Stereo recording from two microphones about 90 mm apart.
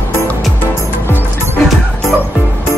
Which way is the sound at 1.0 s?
25° left (ahead or behind).